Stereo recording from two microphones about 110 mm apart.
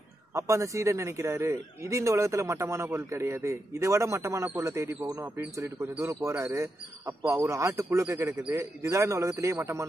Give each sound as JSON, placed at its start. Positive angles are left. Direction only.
{"t": 0.3, "sound": "a man's voice", "side_deg": -25}